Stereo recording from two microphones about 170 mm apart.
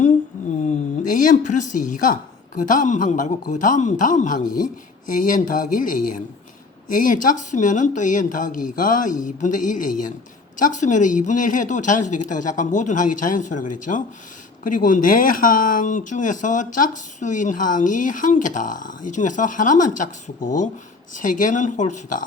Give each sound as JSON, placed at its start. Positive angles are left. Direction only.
{"t": 0.6, "sound": "speech", "side_deg": 50}